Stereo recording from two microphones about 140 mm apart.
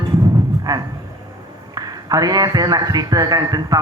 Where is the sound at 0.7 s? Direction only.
25° right (ahead or behind).